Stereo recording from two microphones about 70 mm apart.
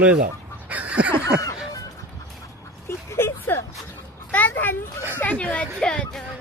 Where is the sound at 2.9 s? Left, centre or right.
Left.